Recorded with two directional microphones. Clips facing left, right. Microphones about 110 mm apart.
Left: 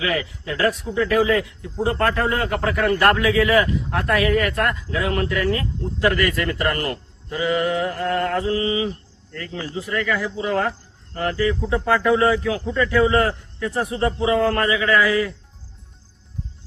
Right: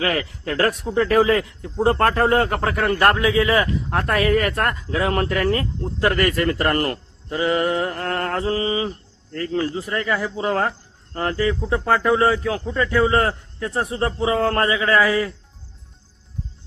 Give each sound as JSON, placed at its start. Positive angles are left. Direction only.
{"t": 0.0, "sound": "a man's voice", "side_deg": -45}
{"t": 3.8, "sound": "speech", "side_deg": -40}